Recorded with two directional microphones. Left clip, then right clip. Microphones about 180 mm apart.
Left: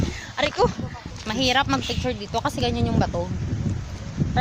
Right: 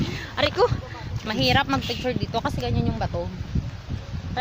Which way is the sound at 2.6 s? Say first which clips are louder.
Left 4 dB; 60° left (ahead or behind).